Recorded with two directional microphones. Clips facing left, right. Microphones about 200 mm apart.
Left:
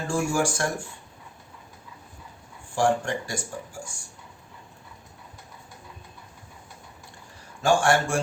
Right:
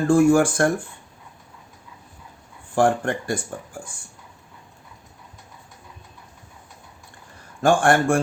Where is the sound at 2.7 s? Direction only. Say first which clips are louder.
Right 4 dB; 55° right (ahead or behind).